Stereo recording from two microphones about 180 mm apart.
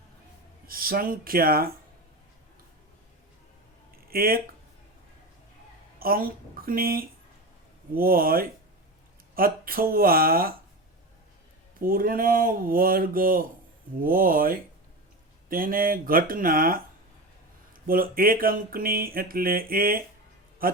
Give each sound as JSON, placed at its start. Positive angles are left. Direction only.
{"t": 0.7, "sound": "speech", "side_deg": -55}
{"t": 3.9, "sound": "a sound", "side_deg": -55}
{"t": 6.0, "sound": "speech", "side_deg": -55}
{"t": 11.8, "sound": "speech", "side_deg": -55}
{"t": 17.8, "sound": "a man's voice", "side_deg": -55}